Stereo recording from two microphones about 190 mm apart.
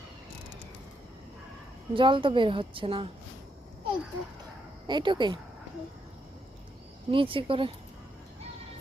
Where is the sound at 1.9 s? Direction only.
25° right (ahead or behind).